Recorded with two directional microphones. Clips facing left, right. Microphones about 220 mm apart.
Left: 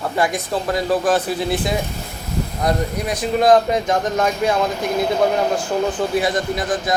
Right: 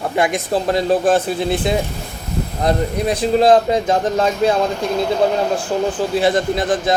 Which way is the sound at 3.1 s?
30° right (ahead or behind).